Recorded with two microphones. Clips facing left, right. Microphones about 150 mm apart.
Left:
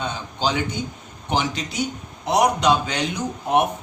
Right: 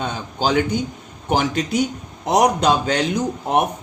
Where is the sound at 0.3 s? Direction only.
45° right (ahead or behind).